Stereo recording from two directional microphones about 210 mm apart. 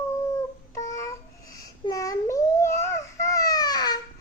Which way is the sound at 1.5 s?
15° left (ahead or behind).